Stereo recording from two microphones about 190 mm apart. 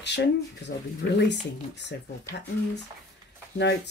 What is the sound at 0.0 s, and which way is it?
Speech, 65° left (ahead or behind).